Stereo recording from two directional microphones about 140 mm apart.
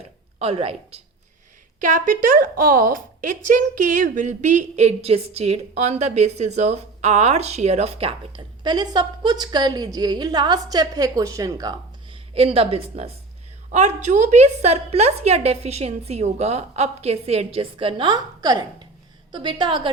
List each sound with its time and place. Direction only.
0.3 s a woman's voice: 45° right (ahead or behind)
1.8 s a woman's voice: 70° right (ahead or behind); by 11.7 s 25° right (ahead or behind)
12.1 s a woman's voice: 40° right (ahead or behind)
13.7 s a woman's voice: 55° right (ahead or behind); by 19.9 s 35° right (ahead or behind)